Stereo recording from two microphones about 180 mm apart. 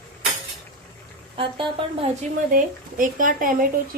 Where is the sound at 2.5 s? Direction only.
50° right (ahead or behind).